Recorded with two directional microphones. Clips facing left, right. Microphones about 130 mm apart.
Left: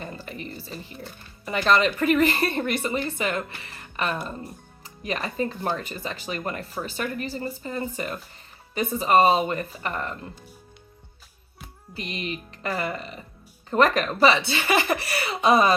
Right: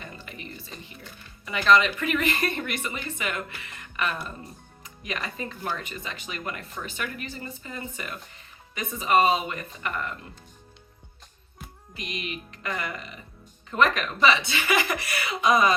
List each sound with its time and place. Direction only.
0.0 s speech: 35° left (ahead or behind)
11.9 s speech: 35° left (ahead or behind)